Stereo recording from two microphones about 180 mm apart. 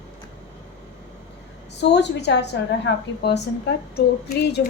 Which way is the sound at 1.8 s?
70° left (ahead or behind).